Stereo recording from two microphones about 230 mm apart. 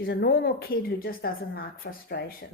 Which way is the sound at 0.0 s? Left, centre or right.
Left.